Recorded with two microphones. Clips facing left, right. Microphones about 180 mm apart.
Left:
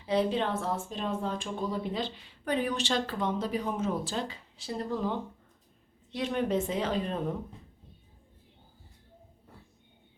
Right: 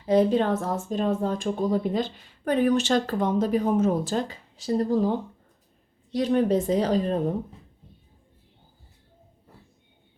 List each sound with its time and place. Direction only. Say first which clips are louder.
0.0 s a woman's voice: right 7 dB; 45° right (ahead or behind)